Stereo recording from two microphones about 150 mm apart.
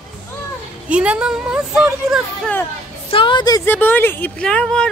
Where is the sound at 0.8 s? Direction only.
10° right (ahead or behind).